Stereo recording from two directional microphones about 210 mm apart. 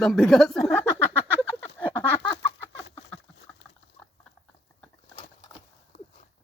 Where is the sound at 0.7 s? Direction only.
10° left (ahead or behind).